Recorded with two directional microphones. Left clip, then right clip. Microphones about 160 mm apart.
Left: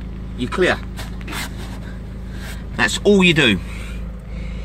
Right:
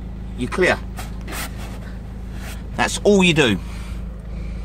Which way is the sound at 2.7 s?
15° right (ahead or behind).